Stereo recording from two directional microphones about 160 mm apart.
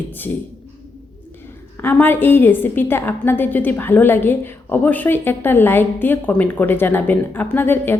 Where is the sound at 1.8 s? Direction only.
15° left (ahead or behind).